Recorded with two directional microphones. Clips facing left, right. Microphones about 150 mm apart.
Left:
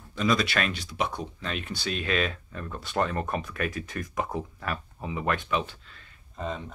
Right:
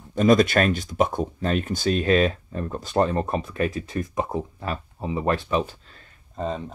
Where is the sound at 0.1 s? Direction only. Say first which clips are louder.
Right 8 dB; 50° right (ahead or behind).